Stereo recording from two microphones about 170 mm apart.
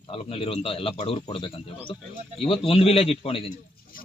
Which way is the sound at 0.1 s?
35° left (ahead or behind).